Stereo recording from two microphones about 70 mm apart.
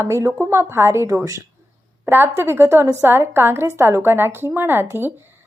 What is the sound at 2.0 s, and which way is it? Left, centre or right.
A woman's voice, right.